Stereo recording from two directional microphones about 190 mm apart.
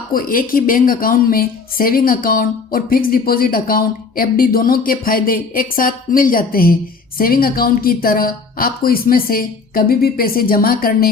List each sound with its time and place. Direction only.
0.1 s a woman's voice: 50° left (ahead or behind)